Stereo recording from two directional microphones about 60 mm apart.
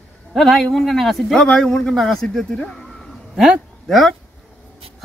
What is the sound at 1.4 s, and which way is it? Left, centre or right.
A man's voice, centre.